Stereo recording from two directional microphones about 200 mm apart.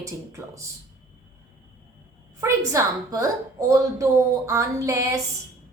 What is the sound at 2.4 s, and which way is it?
A woman's voice, 15° right (ahead or behind).